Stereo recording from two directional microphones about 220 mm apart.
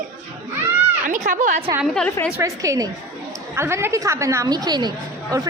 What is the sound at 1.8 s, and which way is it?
Speech, centre (ahead or behind).